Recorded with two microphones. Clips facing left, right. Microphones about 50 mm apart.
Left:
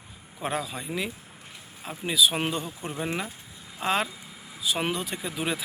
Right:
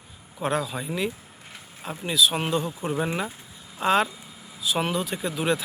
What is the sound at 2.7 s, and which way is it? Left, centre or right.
Speech, centre.